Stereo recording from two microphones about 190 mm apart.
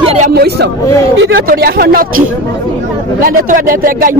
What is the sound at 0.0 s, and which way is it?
Hubbub, 35° right (ahead or behind).